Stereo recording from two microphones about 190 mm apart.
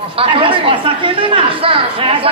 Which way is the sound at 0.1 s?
30° right (ahead or behind).